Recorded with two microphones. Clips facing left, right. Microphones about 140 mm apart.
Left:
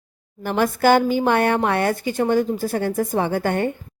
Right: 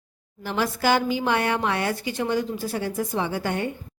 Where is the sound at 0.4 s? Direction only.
50° left (ahead or behind).